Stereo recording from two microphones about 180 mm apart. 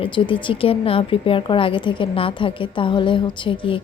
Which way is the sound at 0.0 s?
25° left (ahead or behind).